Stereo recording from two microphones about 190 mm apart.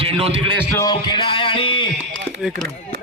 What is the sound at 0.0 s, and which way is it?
Speech, 30° right (ahead or behind).